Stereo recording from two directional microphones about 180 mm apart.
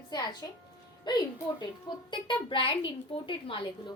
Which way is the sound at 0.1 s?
20° left (ahead or behind).